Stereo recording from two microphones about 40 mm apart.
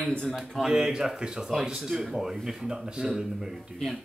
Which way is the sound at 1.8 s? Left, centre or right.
Centre.